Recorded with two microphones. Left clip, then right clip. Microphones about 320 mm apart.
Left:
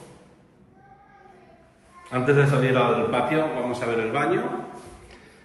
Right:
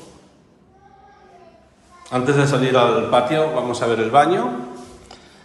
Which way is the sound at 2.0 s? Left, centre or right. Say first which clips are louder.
Right 3 dB; centre.